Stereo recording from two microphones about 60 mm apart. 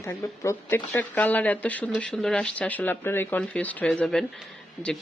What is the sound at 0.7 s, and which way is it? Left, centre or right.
Speech, left.